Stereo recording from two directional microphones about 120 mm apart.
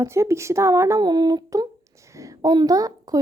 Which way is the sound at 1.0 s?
35° right (ahead or behind).